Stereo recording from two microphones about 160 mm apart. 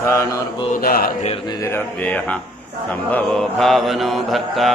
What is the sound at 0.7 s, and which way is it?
Speech, 65° left (ahead or behind).